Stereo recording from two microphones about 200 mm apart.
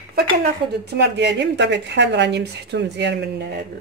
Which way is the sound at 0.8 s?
55° right (ahead or behind).